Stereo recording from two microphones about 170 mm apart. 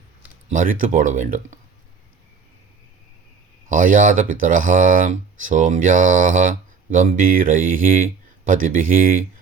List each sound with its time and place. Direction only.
0.5 s speech: 50° right (ahead or behind)
3.7 s speech: 50° right (ahead or behind)